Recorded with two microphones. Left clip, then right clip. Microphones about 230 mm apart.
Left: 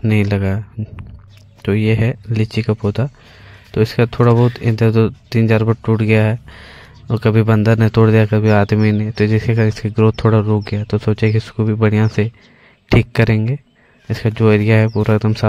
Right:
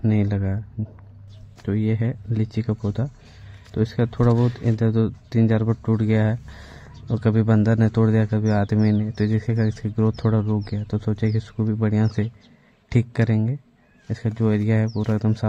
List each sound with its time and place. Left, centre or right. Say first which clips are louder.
0.1 s speech: left 12 dB; left
1.7 s speech: left 9 dB; left